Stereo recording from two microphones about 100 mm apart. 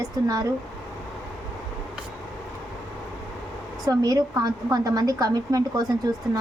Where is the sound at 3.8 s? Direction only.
40° right (ahead or behind).